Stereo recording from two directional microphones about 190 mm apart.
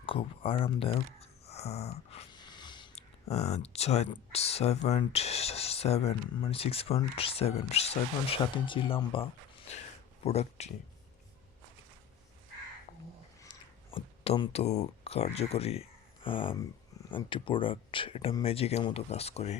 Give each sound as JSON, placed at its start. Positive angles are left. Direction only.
{"t": 0.0, "sound": "speech", "side_deg": 30}
{"t": 10.2, "sound": "speech", "side_deg": 35}
{"t": 13.4, "sound": "speech", "side_deg": 25}